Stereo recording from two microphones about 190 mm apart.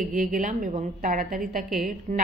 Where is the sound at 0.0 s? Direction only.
45° right (ahead or behind).